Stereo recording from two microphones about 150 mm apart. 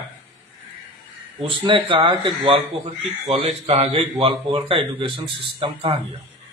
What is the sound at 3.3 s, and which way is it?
Speech, 35° right (ahead or behind).